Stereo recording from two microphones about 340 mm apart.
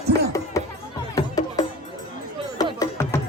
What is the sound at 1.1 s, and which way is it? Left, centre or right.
Music, centre.